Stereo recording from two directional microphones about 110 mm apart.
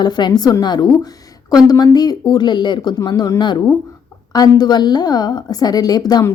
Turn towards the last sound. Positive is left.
turn(degrees=35)  # may be behind; listen again after turning